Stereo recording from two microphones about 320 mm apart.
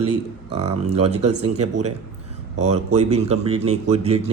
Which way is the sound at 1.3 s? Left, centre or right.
Right.